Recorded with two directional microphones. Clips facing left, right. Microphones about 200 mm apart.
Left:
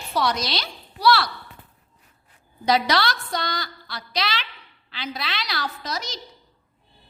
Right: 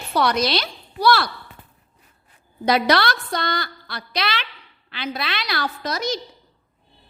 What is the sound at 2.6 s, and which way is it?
A woman's voice, 55° right (ahead or behind).